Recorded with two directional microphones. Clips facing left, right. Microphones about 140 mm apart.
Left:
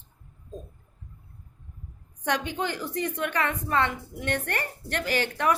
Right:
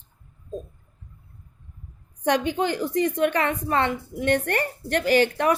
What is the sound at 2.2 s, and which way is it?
A woman's voice, 20° right (ahead or behind).